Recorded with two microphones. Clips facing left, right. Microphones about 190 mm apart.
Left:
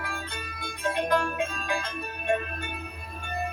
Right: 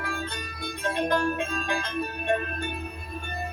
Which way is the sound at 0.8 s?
30° right (ahead or behind).